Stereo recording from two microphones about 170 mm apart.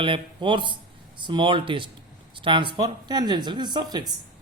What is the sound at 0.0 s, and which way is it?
Speech, 30° right (ahead or behind).